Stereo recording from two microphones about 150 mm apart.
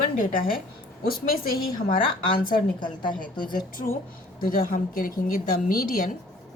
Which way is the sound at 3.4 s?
70° left (ahead or behind).